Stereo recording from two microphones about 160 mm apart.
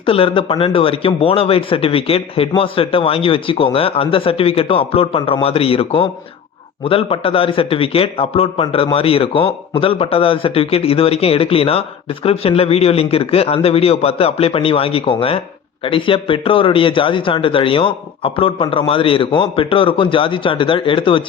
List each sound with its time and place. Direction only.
0.0 s a man's voice: 35° left (ahead or behind)